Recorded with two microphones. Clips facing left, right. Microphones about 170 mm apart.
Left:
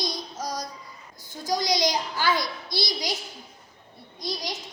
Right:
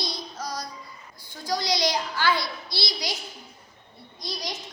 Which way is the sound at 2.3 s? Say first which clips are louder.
Left 2 dB; 45° left (ahead or behind).